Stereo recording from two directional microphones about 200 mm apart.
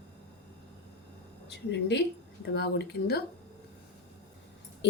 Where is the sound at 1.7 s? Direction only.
60° left (ahead or behind).